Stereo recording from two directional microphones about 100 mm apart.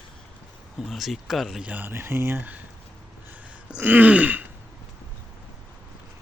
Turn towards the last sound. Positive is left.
turn(degrees=-15)  # may be behind; listen again after turning